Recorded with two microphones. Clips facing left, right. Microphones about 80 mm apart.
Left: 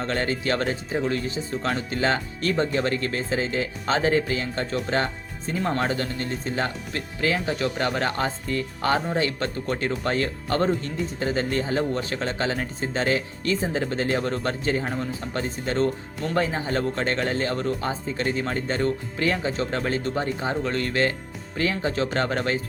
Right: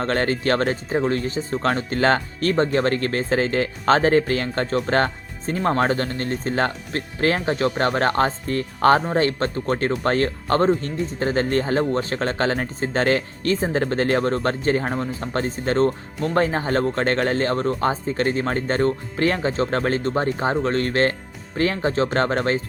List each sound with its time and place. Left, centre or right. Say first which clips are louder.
0.0 s speech: right 4 dB; right